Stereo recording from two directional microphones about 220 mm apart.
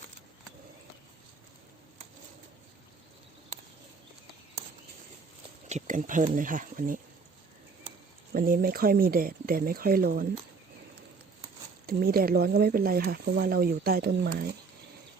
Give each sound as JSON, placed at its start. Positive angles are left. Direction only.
{"t": 5.6, "sound": "speech", "side_deg": -35}
{"t": 8.3, "sound": "speech", "side_deg": -40}
{"t": 11.9, "sound": "speech", "side_deg": -45}